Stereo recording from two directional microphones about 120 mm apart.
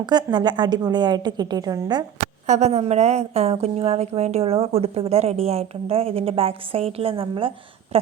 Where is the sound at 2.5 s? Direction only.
70° right (ahead or behind).